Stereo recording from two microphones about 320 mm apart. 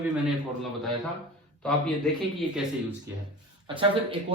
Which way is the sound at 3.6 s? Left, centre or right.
Centre.